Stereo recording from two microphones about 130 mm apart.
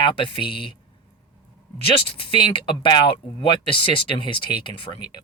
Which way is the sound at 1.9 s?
45° left (ahead or behind).